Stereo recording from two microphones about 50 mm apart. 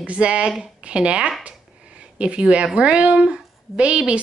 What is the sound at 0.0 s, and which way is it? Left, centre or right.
Speech, right.